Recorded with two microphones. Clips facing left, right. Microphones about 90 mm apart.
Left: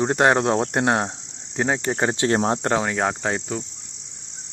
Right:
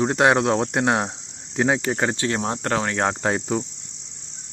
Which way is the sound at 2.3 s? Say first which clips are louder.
Left 4 dB; 35° left (ahead or behind).